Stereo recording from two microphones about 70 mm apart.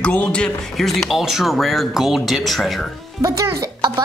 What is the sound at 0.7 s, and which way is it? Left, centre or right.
Speech, centre.